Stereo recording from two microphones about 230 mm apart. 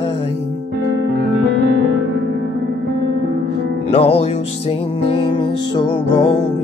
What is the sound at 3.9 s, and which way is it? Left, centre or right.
Music, left.